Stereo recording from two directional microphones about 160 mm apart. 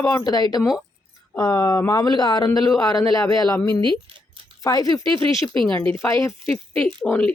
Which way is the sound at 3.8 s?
30° right (ahead or behind).